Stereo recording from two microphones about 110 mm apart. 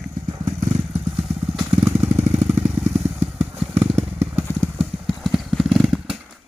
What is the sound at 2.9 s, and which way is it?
Vehicle, 20° right (ahead or behind).